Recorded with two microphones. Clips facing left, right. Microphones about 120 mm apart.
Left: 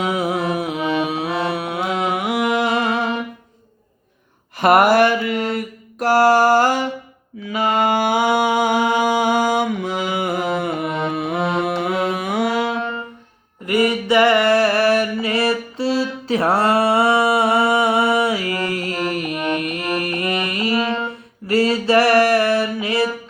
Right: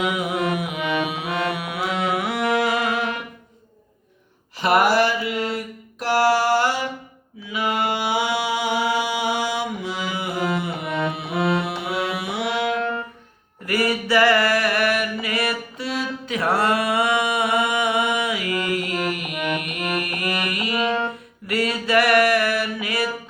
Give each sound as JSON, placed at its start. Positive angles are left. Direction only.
{"t": 0.0, "sound": "music", "side_deg": 35}
{"t": 4.5, "sound": "a sound", "side_deg": 50}
{"t": 5.3, "sound": "mantra", "side_deg": 50}
{"t": 11.1, "sound": "music", "side_deg": 50}
{"t": 13.7, "sound": "music", "side_deg": 20}
{"t": 21.4, "sound": "mantra", "side_deg": 30}